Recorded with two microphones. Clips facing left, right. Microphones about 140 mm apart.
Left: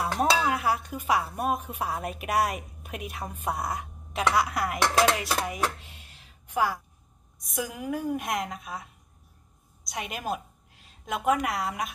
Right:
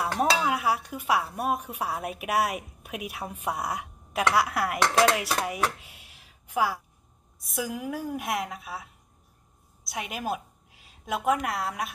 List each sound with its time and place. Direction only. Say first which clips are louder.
0.0 s a woman's voice: even; centre (ahead or behind)
9.8 s a woman's voice: right 1 dB; 5° right (ahead or behind)